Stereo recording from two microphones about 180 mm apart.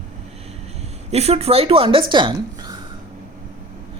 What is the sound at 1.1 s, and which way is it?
Speech, 35° right (ahead or behind).